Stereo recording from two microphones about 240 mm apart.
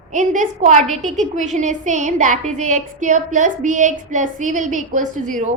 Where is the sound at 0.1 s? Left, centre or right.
Right.